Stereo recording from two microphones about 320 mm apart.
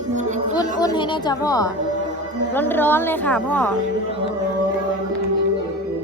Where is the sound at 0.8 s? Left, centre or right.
Centre.